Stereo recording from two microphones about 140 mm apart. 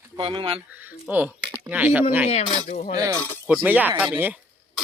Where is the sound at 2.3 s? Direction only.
50° left (ahead or behind).